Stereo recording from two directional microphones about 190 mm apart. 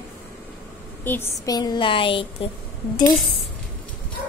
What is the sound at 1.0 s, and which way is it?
Speech, 15° left (ahead or behind).